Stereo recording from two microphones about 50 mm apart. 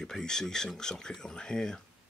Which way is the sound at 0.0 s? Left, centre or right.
Centre.